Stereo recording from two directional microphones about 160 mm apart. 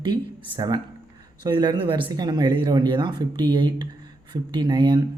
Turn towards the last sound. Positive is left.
turn(degrees=-25)  # may be behind; listen again after turning